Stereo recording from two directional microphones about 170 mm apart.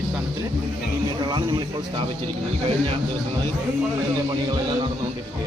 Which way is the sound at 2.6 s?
35° right (ahead or behind).